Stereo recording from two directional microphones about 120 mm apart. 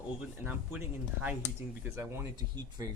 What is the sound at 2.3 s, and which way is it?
Speech, 35° right (ahead or behind).